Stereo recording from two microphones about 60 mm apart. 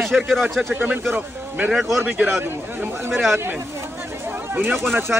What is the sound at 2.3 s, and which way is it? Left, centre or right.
Speech, right.